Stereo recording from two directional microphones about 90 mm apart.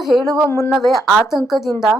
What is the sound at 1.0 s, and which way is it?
Speech, 5° right (ahead or behind).